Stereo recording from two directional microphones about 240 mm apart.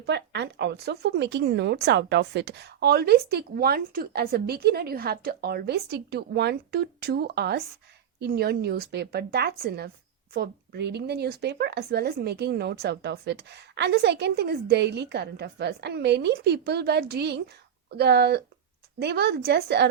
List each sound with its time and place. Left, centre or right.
0.0 s speech: right